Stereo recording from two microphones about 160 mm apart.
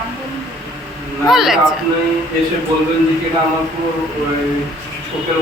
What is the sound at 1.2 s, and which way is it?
Speech, centre (ahead or behind).